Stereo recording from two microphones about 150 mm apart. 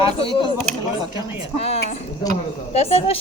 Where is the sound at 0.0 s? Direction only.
35° left (ahead or behind).